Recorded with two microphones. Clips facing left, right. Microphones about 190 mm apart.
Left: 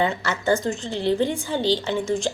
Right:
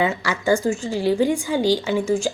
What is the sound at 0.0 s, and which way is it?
A woman's voice, 10° right (ahead or behind).